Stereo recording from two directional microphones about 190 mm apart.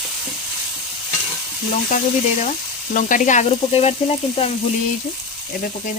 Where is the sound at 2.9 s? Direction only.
45° left (ahead or behind).